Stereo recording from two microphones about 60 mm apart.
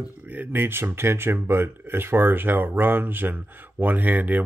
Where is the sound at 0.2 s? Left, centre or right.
Right.